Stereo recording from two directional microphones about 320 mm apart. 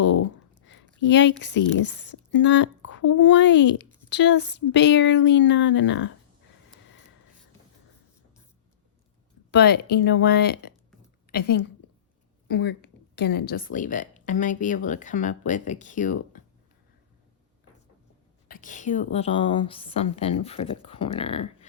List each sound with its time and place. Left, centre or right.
0.0 s a sound: left
0.6 s speech: left
9.5 s a woman's voice: left
18.4 s speech: left